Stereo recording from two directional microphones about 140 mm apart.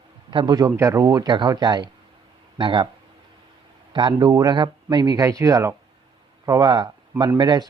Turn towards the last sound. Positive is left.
turn(degrees=-30)  # may be behind; listen again after turning